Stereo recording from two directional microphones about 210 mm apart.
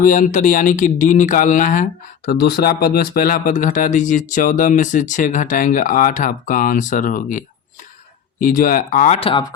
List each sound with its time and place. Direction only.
0.0 s speech: 40° left (ahead or behind)